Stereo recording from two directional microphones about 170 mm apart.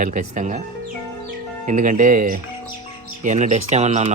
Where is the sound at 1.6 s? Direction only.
50° right (ahead or behind).